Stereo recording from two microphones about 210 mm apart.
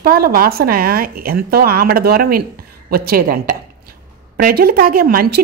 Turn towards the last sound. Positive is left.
turn(degrees=-45)  # may be behind; listen again after turning